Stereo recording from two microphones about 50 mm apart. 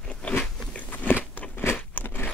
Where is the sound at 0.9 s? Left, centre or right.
Left.